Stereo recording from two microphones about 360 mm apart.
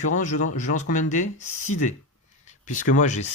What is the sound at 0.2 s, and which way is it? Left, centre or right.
Speech, left.